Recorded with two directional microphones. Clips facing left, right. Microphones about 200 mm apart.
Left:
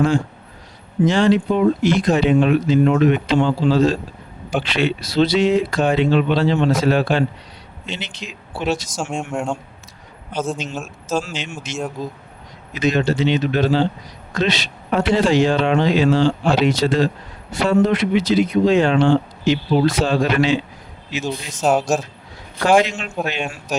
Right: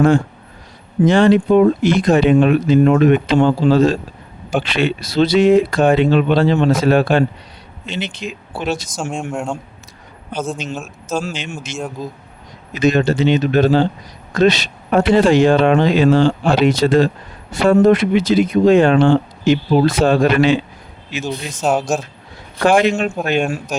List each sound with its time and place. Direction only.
1.0 s speech: 55° right (ahead or behind)
9.3 s speech: centre (ahead or behind)
11.3 s speech: 50° right (ahead or behind)
21.2 s speech: centre (ahead or behind)
22.8 s speech: 50° right (ahead or behind)